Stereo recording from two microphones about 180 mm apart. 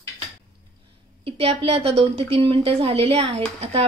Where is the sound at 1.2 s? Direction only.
30° right (ahead or behind).